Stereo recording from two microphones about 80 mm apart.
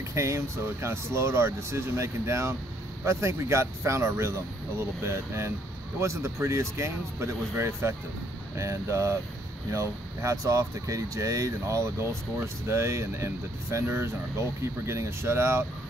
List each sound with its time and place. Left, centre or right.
0.1 s speech: right